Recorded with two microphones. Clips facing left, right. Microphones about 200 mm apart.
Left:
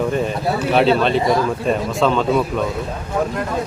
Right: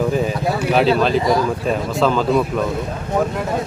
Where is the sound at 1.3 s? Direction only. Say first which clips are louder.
Even; centre (ahead or behind).